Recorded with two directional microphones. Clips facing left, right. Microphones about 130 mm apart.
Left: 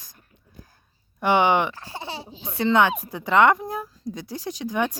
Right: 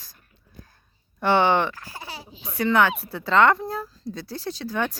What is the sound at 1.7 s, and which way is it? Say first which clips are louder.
Speech: left 4 dB; 25° left (ahead or behind).